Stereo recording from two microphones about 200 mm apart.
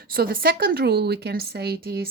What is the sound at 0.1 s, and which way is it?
Speech, 50° right (ahead or behind).